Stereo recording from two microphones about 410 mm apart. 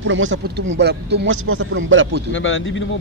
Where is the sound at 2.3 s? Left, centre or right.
Left.